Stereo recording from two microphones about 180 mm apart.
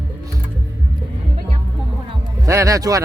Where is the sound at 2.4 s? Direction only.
15° right (ahead or behind).